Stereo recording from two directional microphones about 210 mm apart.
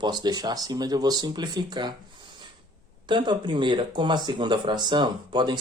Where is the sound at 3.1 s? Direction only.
20° right (ahead or behind).